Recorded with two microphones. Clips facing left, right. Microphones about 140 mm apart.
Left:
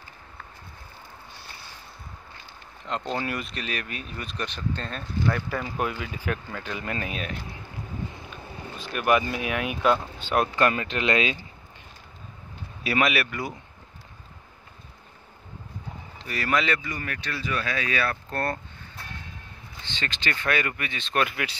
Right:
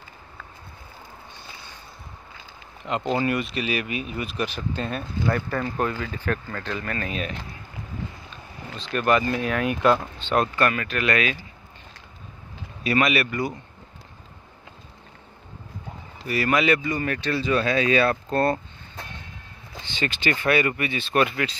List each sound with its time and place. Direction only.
2.8 s speech: 10° right (ahead or behind)
5.5 s speech: 5° left (ahead or behind)
7.1 s speech: centre (ahead or behind); by 11.3 s 25° left (ahead or behind)
12.8 s speech: 5° left (ahead or behind)
16.2 s speech: 5° right (ahead or behind)
16.8 s speech: 25° right (ahead or behind)
19.9 s speech: 10° right (ahead or behind)